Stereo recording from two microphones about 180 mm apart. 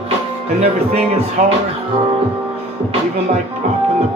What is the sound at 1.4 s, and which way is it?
Music, 45° right (ahead or behind).